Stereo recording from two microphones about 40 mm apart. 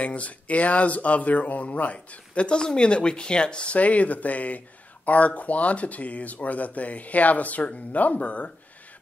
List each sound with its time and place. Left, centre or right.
0.0 s speech: left